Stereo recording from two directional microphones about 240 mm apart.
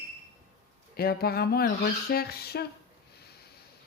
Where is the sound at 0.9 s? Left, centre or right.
Left.